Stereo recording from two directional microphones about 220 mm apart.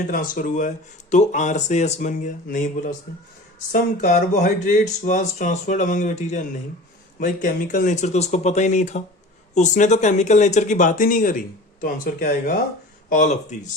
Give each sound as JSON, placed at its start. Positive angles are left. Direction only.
{"t": 0.1, "sound": "speech", "side_deg": 40}